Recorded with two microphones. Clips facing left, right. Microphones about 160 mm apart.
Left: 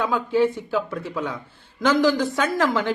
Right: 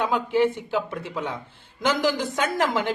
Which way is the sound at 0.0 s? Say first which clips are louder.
Left 1 dB; 20° right (ahead or behind).